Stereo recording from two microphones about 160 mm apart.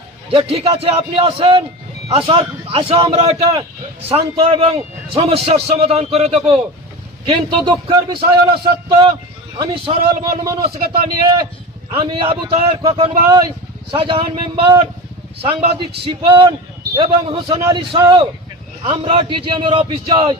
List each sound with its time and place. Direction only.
0.3 s a man's voice: 35° right (ahead or behind)
11.9 s a man's voice: 35° right (ahead or behind)